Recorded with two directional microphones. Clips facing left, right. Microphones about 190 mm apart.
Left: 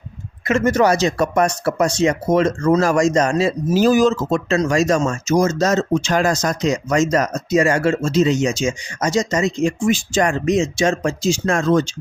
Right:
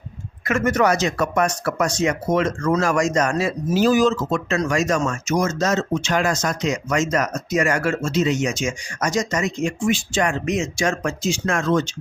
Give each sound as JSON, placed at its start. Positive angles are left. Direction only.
{"t": 0.4, "sound": "speech", "side_deg": 25}
{"t": 3.8, "sound": "speech", "side_deg": 45}